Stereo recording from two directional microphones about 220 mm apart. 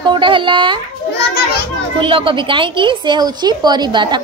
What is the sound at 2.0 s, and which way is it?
A woman's voice, 20° right (ahead or behind).